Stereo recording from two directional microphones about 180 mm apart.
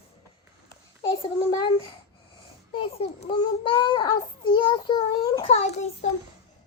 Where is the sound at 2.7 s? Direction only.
30° left (ahead or behind).